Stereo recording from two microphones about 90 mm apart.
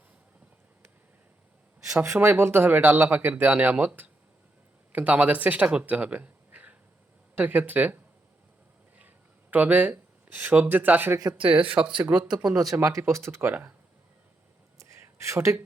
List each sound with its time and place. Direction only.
2.1 s speech: 20° right (ahead or behind)
9.0 s a sound: 20° right (ahead or behind)
11.3 s speech: 15° right (ahead or behind)
13.0 s speech: 30° right (ahead or behind)
13.5 s speech: 15° right (ahead or behind)
14.8 s a sound: 35° right (ahead or behind)